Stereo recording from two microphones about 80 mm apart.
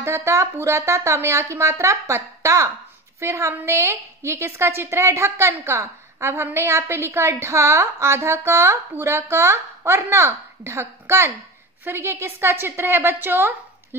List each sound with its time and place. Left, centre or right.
0.0 s a woman's voice: right